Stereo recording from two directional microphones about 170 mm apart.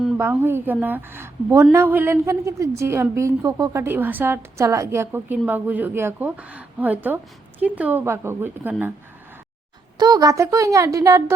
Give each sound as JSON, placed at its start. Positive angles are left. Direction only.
{"t": 0.2, "sound": "a woman's voice", "side_deg": -15}
{"t": 10.0, "sound": "speech", "side_deg": -20}